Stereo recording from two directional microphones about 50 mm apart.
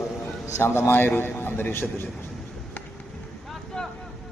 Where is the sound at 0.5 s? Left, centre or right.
Left.